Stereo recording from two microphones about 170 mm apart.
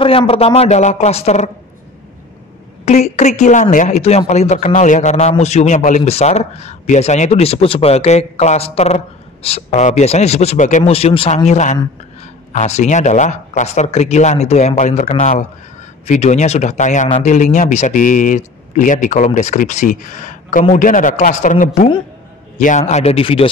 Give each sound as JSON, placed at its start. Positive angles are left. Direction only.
{"t": 0.0, "sound": "a man's voice", "side_deg": 30}
{"t": 2.8, "sound": "a man's voice", "side_deg": 40}